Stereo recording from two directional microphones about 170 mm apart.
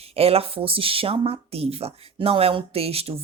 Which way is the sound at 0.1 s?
35° right (ahead or behind).